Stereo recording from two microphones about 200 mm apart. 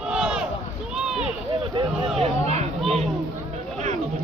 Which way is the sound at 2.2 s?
35° right (ahead or behind).